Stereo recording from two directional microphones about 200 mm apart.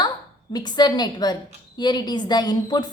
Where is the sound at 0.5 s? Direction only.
20° left (ahead or behind).